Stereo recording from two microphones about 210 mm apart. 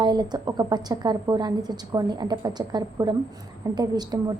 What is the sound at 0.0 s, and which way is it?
A woman's voice, 20° right (ahead or behind).